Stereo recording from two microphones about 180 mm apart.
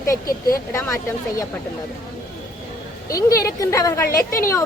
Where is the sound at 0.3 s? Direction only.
55° left (ahead or behind).